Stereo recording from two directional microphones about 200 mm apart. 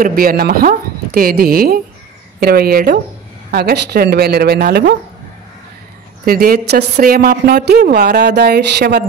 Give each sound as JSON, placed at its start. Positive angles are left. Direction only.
{"t": 0.0, "sound": "a woman's voice", "side_deg": -45}
{"t": 6.2, "sound": "a woman's voice", "side_deg": -50}